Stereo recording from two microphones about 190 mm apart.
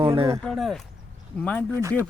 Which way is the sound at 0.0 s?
25° right (ahead or behind).